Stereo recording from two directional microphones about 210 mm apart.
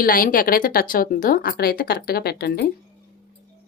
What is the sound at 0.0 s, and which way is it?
A woman's voice, 40° left (ahead or behind).